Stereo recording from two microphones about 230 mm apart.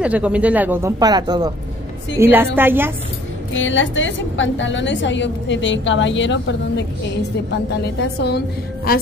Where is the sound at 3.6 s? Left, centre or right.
Left.